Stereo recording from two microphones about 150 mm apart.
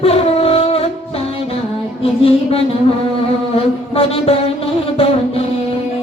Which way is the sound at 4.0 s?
40° left (ahead or behind).